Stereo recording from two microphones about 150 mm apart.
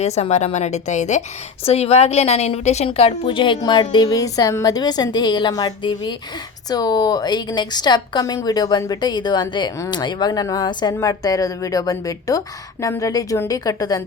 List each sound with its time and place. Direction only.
0.0 s a woman's voice: 45° left (ahead or behind); by 14.0 s 25° left (ahead or behind)